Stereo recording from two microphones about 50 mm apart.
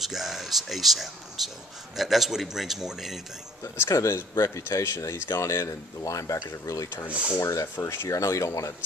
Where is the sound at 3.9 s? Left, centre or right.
Left.